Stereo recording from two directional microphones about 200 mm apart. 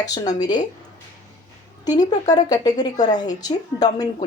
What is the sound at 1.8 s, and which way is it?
A woman's voice, 20° left (ahead or behind).